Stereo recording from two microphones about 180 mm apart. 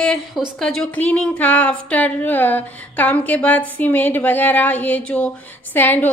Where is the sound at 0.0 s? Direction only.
Centre (ahead or behind).